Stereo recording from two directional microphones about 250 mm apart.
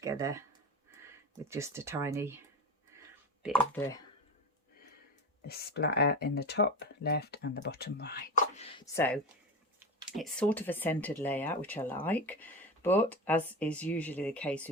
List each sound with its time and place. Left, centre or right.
0.0 s speech: centre
1.5 s speech: centre
2.9 s a sound: centre
3.4 s speech: centre
5.5 s speech: left
8.5 s a sound: left
9.0 s speech: centre